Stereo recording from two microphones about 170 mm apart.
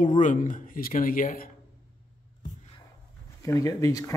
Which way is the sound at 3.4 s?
20° left (ahead or behind).